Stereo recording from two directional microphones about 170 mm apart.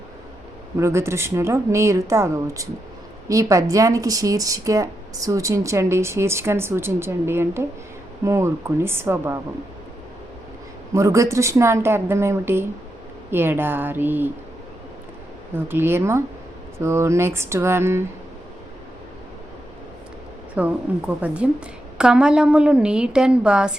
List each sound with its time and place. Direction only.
0.8 s speech: 15° right (ahead or behind)
10.9 s speech: 20° right (ahead or behind)
15.5 s speech: 15° right (ahead or behind)
20.6 s a woman's voice: 10° right (ahead or behind)